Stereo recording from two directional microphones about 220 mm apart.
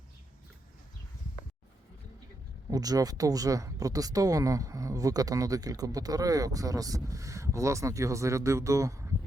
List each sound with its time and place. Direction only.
2.6 s speech: 15° right (ahead or behind)